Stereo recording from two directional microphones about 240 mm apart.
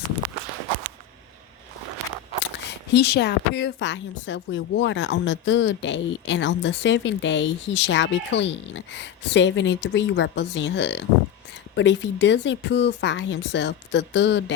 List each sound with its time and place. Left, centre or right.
2.4 s speech: left